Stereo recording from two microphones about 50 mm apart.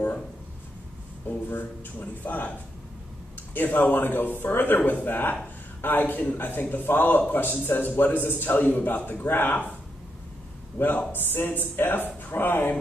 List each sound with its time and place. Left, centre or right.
1.3 s a man's voice: left
3.5 s a man's voice: left
10.8 s speech: left